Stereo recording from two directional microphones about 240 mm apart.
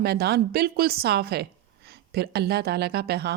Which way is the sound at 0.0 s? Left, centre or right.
Right.